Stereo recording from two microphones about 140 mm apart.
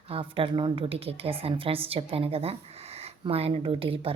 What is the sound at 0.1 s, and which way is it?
A woman's voice, 40° right (ahead or behind).